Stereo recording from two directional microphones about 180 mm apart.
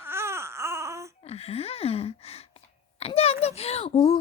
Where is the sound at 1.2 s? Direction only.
35° left (ahead or behind).